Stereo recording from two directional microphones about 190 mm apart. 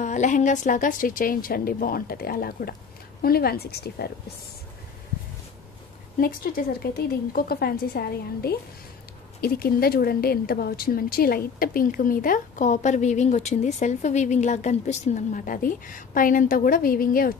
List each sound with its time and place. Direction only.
0.0 s speech: 40° left (ahead or behind); by 4.1 s 55° left (ahead or behind)
6.1 s speech: 50° left (ahead or behind)